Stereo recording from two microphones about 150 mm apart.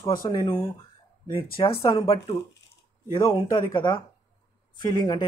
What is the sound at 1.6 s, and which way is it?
Speech, 35° left (ahead or behind).